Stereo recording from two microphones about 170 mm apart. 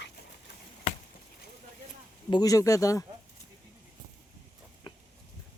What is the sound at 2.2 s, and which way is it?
Speech, 25° left (ahead or behind).